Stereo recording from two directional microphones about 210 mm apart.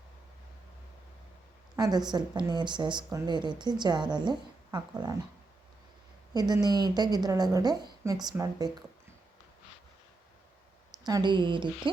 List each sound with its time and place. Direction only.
1.7 s speech: 20° right (ahead or behind)
6.3 s speech: 20° right (ahead or behind)
11.0 s speech: 20° right (ahead or behind)